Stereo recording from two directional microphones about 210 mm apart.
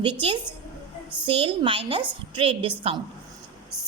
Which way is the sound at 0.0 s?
25° right (ahead or behind).